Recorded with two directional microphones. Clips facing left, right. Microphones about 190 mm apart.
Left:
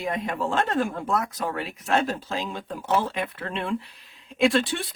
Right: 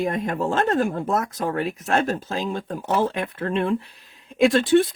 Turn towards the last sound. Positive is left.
turn(degrees=-45)  # may be behind; listen again after turning